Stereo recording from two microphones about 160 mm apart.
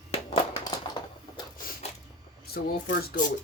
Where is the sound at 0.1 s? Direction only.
40° left (ahead or behind).